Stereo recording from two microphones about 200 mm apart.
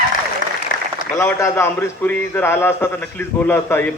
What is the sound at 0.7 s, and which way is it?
Applause, 45° left (ahead or behind).